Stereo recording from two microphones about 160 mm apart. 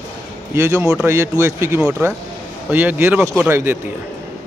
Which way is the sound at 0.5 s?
15° right (ahead or behind).